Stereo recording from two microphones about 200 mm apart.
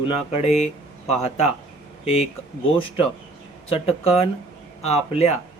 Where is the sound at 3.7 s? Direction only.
30° left (ahead or behind).